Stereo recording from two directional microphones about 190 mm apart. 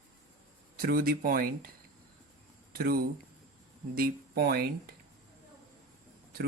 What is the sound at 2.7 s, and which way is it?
Speech, 55° right (ahead or behind).